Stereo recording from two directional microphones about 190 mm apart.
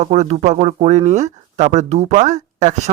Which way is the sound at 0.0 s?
35° right (ahead or behind).